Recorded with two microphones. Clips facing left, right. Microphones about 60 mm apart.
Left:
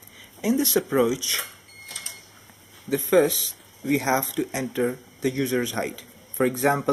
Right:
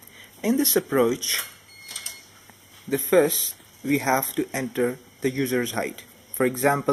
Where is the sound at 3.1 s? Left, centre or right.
Centre.